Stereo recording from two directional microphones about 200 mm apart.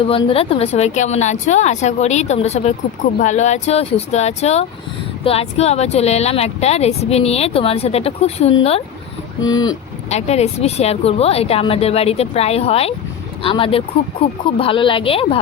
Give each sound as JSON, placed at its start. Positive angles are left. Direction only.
{"t": 0.0, "sound": "speech", "side_deg": 25}
{"t": 9.4, "sound": "a woman's voice", "side_deg": 20}
{"t": 10.1, "sound": "a woman's voice", "side_deg": 35}